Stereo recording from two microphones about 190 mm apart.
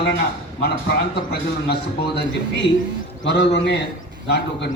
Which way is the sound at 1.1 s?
60° left (ahead or behind).